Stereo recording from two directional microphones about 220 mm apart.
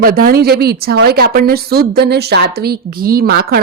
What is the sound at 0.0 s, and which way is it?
Speech, 40° right (ahead or behind).